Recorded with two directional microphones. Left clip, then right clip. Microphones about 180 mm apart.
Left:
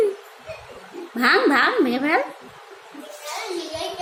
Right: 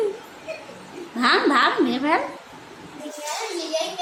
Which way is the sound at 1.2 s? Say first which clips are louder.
Left 1 dB; 10° left (ahead or behind).